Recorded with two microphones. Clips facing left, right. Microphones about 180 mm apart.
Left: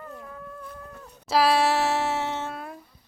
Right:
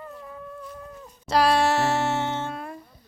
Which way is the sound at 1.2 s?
5° left (ahead or behind).